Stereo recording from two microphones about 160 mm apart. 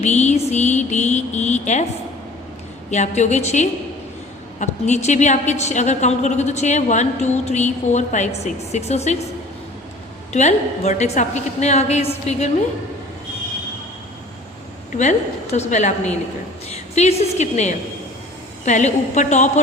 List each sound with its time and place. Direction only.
0.0 s a woman's voice: 45° left (ahead or behind)
2.9 s a woman's voice: 45° left (ahead or behind)
10.3 s a woman's voice: 45° left (ahead or behind)
15.5 s a woman's voice: 45° left (ahead or behind)